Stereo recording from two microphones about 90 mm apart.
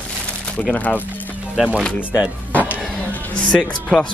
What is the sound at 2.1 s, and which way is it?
Speech, 15° right (ahead or behind).